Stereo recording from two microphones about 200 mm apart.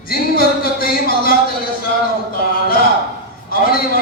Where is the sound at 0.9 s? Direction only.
50° left (ahead or behind).